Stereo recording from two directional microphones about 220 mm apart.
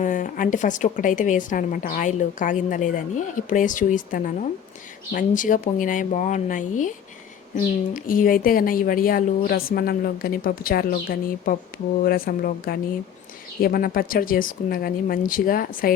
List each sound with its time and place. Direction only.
0.0 s a woman's voice: 35° left (ahead or behind)
7.9 s a woman's voice: 40° left (ahead or behind)